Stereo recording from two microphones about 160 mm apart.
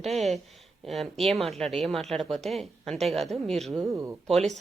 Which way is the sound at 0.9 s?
Centre (ahead or behind).